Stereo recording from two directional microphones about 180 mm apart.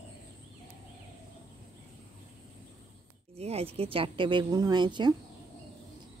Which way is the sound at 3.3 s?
35° right (ahead or behind).